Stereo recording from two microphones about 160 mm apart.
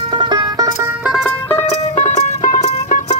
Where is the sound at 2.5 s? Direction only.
45° left (ahead or behind).